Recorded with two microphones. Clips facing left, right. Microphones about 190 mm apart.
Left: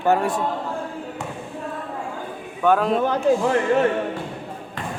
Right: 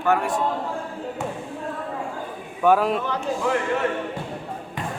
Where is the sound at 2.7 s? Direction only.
5° right (ahead or behind).